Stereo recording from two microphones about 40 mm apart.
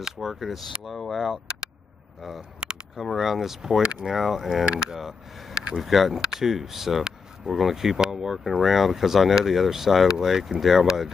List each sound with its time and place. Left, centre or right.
0.0 s speech: centre
3.0 s speech: centre
5.5 s a sound: right
5.8 s speech: centre
8.5 s speech: centre